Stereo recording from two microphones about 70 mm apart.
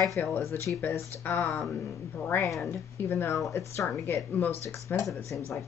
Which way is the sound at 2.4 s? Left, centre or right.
Centre.